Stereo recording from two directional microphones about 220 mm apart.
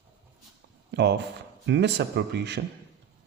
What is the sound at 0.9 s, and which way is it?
Speech, 50° right (ahead or behind).